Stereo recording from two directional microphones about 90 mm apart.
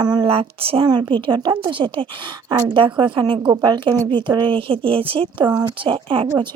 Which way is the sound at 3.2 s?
50° right (ahead or behind).